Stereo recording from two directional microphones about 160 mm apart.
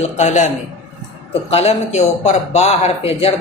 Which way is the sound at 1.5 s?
40° left (ahead or behind).